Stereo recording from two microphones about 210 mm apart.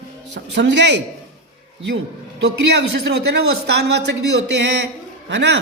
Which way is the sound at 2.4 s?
55° right (ahead or behind).